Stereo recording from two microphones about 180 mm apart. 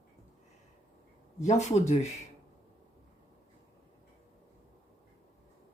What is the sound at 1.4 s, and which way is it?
Speech, 40° left (ahead or behind).